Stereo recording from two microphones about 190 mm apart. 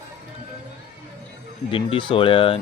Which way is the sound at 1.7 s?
25° left (ahead or behind).